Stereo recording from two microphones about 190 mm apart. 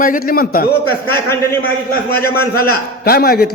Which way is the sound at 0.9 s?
10° left (ahead or behind).